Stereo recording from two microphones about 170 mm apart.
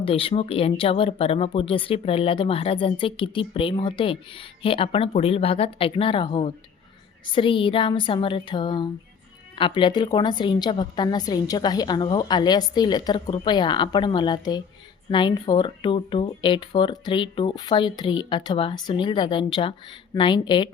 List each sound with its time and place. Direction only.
0.0 s speech: 35° left (ahead or behind)